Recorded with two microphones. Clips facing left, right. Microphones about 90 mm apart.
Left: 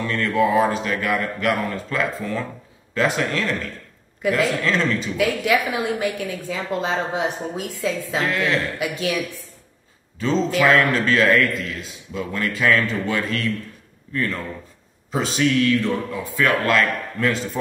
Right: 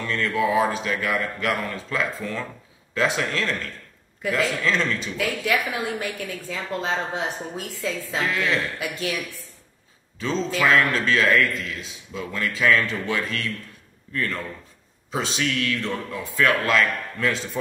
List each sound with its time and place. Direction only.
0.0 s a man's voice: centre (ahead or behind)
5.1 s a woman's voice: 15° left (ahead or behind)
8.3 s a man's voice: centre (ahead or behind)
8.7 s a woman's voice: 15° left (ahead or behind)
10.1 s a man's voice: centre (ahead or behind)